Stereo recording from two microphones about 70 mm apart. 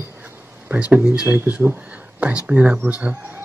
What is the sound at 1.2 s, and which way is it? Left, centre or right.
Speech, right.